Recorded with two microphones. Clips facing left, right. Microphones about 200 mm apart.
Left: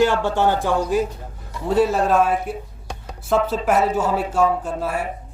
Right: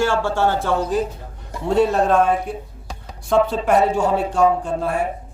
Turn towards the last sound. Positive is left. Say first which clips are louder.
# right 3 dB
turn(degrees=5)  # may be behind; listen again after turning